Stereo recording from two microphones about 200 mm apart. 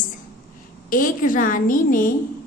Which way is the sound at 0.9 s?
45° left (ahead or behind).